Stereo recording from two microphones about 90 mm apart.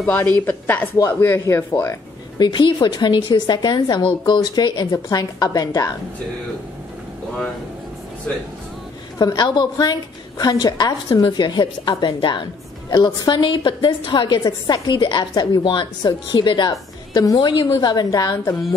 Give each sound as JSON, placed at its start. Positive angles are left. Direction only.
{"t": 0.0, "sound": "a woman's voice", "side_deg": 20}
{"t": 1.2, "sound": "a woman's voice", "side_deg": 30}
{"t": 2.3, "sound": "a woman's voice", "side_deg": 60}
{"t": 9.2, "sound": "a woman's voice", "side_deg": 50}
{"t": 11.2, "sound": "a woman's voice", "side_deg": 60}
{"t": 17.1, "sound": "a woman's voice", "side_deg": 45}